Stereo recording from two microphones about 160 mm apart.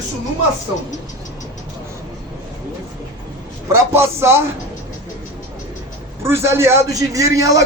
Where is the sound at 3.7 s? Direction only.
15° right (ahead or behind).